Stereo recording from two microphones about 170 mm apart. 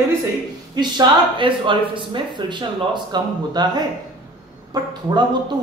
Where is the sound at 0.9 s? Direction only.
30° right (ahead or behind).